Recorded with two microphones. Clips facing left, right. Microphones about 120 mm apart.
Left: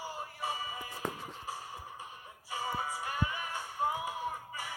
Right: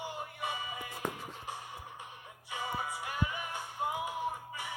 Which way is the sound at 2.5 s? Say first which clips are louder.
Left 1 dB; 35° left (ahead or behind).